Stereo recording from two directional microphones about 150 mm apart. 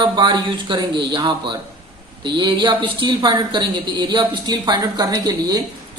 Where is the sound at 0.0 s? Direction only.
30° right (ahead or behind).